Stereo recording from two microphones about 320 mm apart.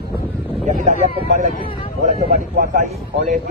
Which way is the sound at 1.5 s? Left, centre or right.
Centre.